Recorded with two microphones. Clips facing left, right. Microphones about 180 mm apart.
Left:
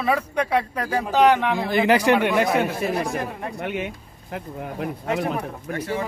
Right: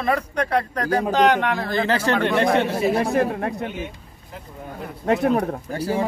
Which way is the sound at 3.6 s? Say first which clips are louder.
Left 1 dB; 70° left (ahead or behind).